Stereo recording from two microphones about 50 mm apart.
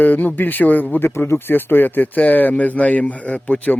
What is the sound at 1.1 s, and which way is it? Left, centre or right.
Speech, left.